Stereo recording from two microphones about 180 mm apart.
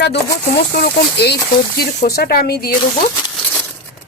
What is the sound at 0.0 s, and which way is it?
Speech, 65° left (ahead or behind).